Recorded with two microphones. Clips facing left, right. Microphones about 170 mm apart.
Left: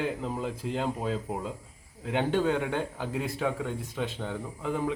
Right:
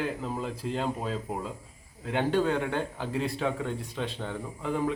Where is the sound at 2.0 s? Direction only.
15° left (ahead or behind).